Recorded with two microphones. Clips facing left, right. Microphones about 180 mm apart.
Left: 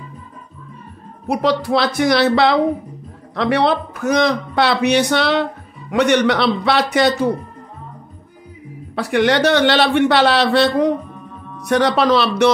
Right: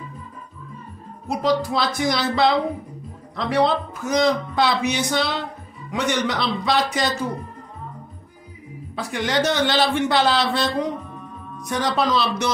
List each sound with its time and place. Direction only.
1.2 s a man's voice: 65° left (ahead or behind)
8.9 s a man's voice: 65° left (ahead or behind)